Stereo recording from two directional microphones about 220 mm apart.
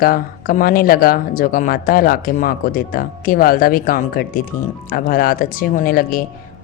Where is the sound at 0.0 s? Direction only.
40° left (ahead or behind).